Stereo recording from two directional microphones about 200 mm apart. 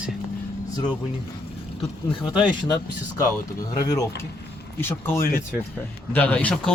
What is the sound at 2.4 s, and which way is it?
Speech, 20° left (ahead or behind).